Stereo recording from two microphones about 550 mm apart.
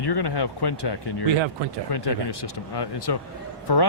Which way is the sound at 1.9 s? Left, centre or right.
Left.